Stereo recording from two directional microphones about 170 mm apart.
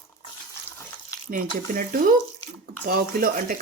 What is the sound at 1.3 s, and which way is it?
Speech, 50° right (ahead or behind).